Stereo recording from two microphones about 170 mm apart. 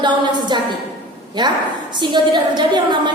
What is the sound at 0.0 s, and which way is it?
Mantra, 25° right (ahead or behind).